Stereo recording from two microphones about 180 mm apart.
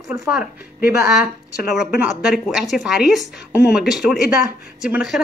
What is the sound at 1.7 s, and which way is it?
Speech, 5° right (ahead or behind).